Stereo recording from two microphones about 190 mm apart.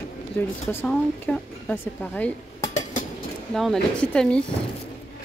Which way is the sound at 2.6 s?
40° left (ahead or behind).